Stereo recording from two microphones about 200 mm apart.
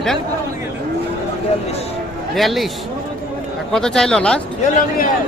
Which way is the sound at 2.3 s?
Centre (ahead or behind).